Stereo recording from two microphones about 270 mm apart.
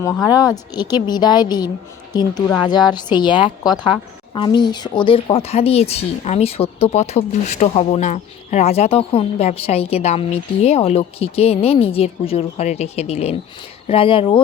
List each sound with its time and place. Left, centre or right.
0.0 s a woman's voice: centre